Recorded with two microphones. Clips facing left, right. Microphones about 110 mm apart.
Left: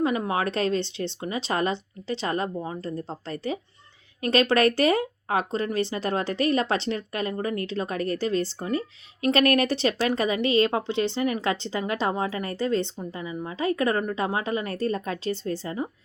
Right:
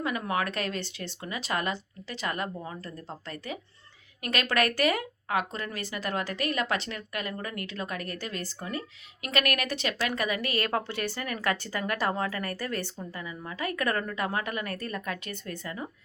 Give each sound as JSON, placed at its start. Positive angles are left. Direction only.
{"t": 0.0, "sound": "speech", "side_deg": 25}